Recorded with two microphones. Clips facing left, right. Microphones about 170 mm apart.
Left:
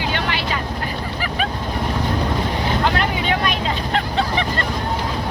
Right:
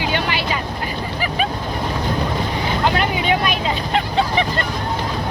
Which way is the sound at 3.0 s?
10° right (ahead or behind).